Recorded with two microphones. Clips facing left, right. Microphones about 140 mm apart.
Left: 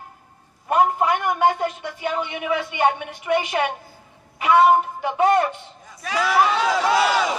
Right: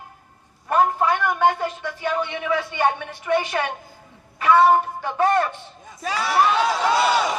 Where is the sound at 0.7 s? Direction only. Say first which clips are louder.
Left 1 dB; 15° left (ahead or behind).